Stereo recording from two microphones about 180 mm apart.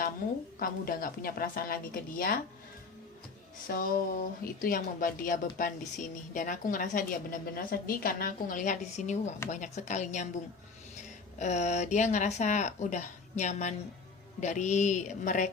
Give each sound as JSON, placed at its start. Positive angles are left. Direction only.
{"t": 0.6, "sound": "speech", "side_deg": 55}
{"t": 3.7, "sound": "speech", "side_deg": 50}
{"t": 11.3, "sound": "speech", "side_deg": 40}